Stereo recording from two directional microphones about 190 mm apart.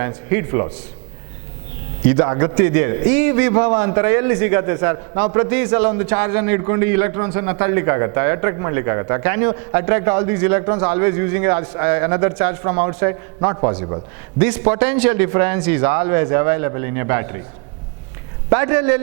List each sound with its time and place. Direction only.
0.0 s a man's voice: 15° right (ahead or behind)
2.0 s a man's voice: 15° right (ahead or behind)
18.5 s a man's voice: 15° right (ahead or behind)